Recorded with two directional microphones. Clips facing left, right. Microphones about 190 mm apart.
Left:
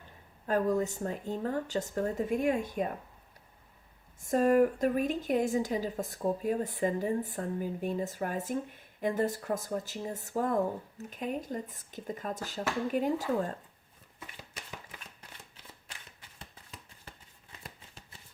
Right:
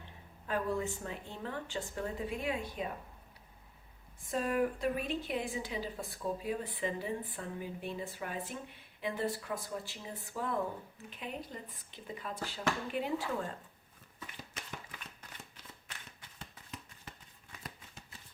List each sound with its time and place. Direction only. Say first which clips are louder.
0.4 s a woman's voice: left 6 dB; 40° left (ahead or behind)
4.2 s a woman's voice: left 8 dB; 45° left (ahead or behind)